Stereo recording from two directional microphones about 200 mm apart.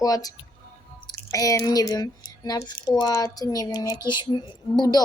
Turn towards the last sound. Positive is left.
turn(degrees=20)  # may be behind; listen again after turning